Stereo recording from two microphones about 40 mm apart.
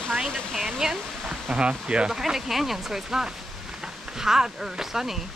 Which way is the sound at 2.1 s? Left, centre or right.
Centre.